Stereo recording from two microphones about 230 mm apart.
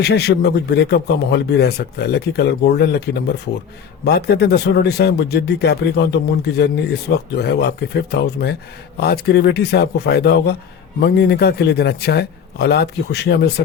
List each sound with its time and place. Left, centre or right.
0.0 s a man's voice: left